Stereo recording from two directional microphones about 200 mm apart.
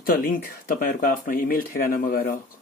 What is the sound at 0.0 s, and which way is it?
Speech, 45° left (ahead or behind).